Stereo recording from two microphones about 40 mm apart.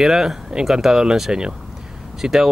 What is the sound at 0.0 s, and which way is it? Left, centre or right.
Speech, centre.